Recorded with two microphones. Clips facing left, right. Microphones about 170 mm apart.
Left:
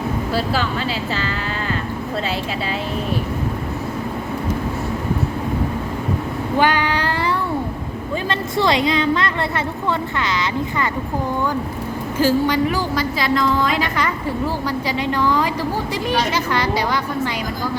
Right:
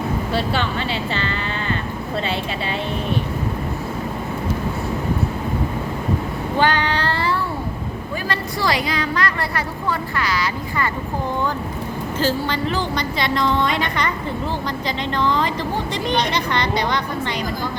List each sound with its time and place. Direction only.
0.3 s a woman's voice: centre (ahead or behind)
6.6 s child singing: 10° left (ahead or behind)
8.3 s a woman's voice: 20° left (ahead or behind)
12.2 s a woman's voice: 10° left (ahead or behind)